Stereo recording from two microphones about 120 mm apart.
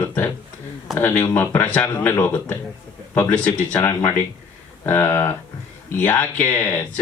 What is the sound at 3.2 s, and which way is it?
Speech, 15° left (ahead or behind).